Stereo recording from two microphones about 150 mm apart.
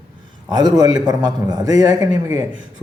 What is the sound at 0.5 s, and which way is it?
A man's voice, 25° right (ahead or behind).